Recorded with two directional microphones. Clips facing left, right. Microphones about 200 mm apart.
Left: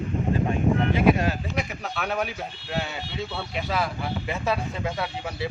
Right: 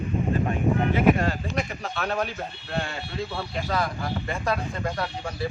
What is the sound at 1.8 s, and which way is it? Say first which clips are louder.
A man's voice: even; centre (ahead or behind).